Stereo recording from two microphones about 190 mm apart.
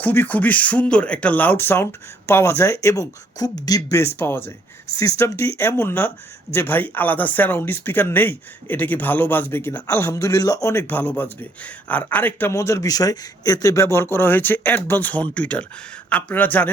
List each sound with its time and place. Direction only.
0.0 s speech: 10° left (ahead or behind)